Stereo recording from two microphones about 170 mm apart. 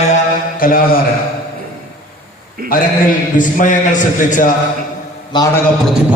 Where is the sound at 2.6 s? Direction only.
60° right (ahead or behind).